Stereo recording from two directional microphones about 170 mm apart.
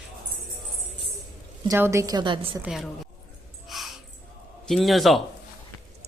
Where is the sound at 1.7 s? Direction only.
15° right (ahead or behind).